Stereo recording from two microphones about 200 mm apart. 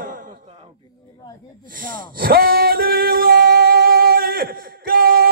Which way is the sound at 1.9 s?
45° right (ahead or behind).